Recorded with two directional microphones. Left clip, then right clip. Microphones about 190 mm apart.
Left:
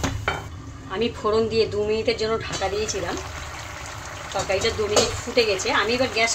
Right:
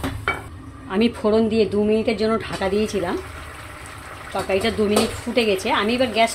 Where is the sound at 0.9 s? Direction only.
50° right (ahead or behind).